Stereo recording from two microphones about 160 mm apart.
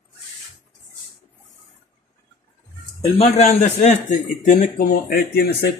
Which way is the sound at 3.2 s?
45° left (ahead or behind).